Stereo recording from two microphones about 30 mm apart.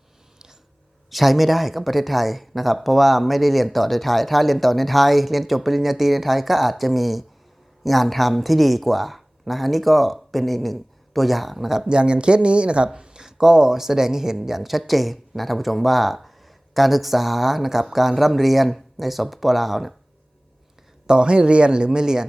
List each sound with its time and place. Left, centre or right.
1.1 s speech: centre
11.9 s speech: right
12.9 s a sound: right
13.2 s speech: centre
21.1 s speech: right